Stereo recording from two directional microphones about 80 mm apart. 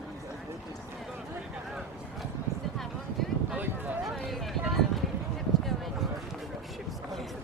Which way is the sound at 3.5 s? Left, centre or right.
Centre.